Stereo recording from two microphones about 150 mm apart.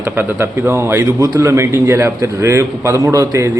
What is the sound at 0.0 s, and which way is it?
Speech, 15° right (ahead or behind).